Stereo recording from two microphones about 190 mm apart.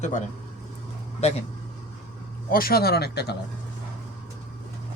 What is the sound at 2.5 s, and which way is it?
Speech, 50° left (ahead or behind).